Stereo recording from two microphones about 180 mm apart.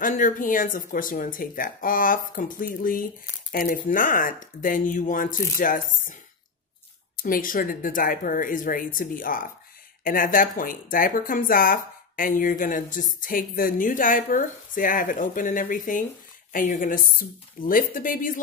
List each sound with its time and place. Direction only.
0.0 s speech: 45° left (ahead or behind)
7.2 s speech: 50° left (ahead or behind)